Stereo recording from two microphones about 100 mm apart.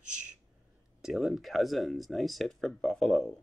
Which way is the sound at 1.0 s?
Centre (ahead or behind).